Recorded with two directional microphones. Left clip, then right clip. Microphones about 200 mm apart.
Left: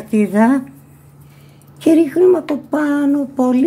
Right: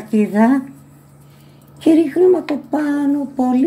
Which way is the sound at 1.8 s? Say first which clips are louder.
Left 1 dB; 35° left (ahead or behind).